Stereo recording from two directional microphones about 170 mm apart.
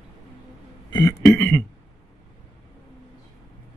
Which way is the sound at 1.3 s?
15° left (ahead or behind).